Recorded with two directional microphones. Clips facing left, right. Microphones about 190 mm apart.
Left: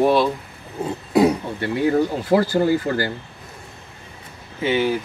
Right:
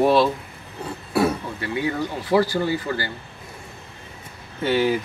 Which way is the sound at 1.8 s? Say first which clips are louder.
Left 8 dB; 45° left (ahead or behind).